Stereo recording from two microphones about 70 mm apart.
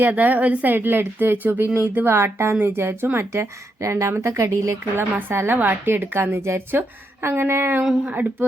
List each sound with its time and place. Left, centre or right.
0.0 s speech: right
4.9 s speech: right
8.0 s speech: right